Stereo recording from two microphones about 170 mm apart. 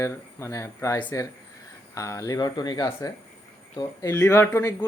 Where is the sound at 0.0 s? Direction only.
20° left (ahead or behind).